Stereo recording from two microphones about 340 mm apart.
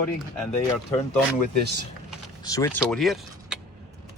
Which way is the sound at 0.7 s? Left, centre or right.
Centre.